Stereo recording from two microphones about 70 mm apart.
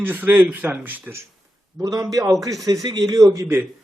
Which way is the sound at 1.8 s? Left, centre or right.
Right.